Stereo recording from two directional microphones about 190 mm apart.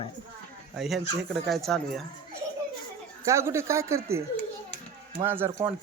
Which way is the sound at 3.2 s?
15° right (ahead or behind).